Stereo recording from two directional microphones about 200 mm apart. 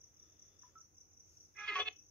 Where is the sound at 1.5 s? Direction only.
5° left (ahead or behind).